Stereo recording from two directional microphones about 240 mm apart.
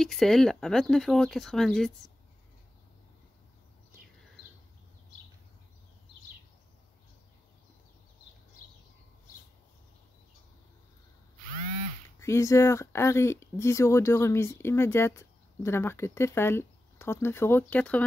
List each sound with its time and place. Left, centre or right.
0.0 s speech: centre
12.2 s speech: centre